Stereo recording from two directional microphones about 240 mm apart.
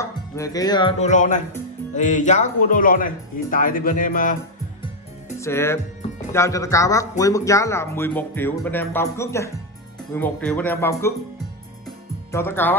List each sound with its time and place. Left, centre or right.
0.0 s music: centre; by 1.4 s left
2.0 s speech: left
5.4 s speech: centre
12.3 s speech: centre